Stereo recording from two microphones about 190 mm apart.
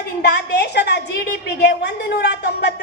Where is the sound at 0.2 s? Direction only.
60° left (ahead or behind).